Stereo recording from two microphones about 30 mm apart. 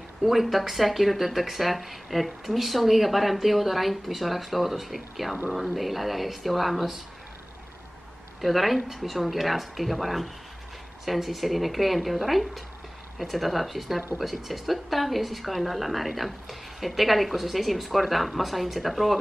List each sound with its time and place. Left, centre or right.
0.2 s a woman's voice: centre
8.4 s a woman's voice: centre